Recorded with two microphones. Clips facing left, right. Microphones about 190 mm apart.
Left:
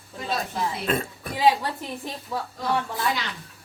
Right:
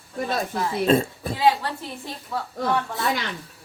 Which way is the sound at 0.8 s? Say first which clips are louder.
Right 7 dB; 30° right (ahead or behind).